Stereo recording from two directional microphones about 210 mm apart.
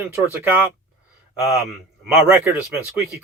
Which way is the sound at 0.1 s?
10° right (ahead or behind).